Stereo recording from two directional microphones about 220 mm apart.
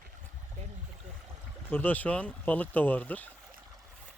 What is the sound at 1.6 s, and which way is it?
Speech, 10° left (ahead or behind).